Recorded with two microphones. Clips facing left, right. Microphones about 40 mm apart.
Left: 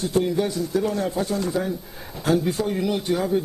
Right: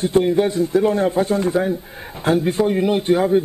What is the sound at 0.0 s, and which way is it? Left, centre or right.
A man's voice, right.